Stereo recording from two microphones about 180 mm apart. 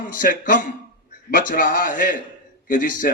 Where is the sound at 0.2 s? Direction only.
50° left (ahead or behind).